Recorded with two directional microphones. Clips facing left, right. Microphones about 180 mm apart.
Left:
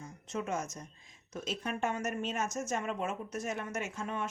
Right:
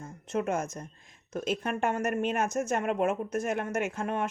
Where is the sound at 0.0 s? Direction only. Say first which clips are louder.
Right 7 dB; 55° right (ahead or behind).